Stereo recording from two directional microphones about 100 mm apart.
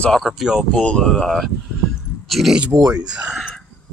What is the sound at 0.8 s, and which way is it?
Speech, 10° left (ahead or behind).